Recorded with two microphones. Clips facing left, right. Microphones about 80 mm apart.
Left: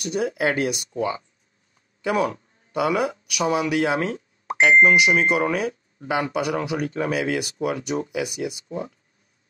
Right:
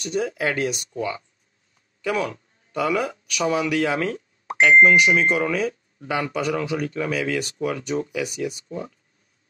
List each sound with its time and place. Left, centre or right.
0.0 s speech: centre